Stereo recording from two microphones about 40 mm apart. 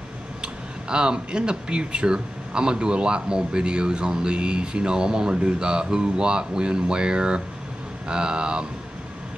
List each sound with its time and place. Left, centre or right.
0.4 s speech: right